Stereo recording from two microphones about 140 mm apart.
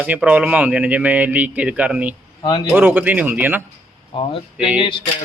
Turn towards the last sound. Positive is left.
turn(degrees=35)  # may be behind; listen again after turning